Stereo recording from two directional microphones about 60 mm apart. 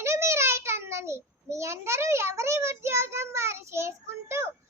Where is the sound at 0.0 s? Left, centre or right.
Right.